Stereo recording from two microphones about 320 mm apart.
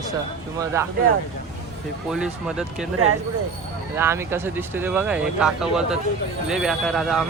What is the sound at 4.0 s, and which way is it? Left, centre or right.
Speech, centre.